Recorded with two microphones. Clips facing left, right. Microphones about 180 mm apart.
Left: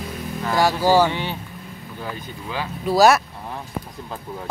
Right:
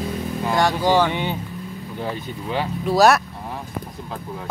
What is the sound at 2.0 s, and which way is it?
Speech, 25° right (ahead or behind).